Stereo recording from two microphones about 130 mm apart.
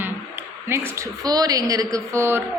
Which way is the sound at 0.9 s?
25° right (ahead or behind).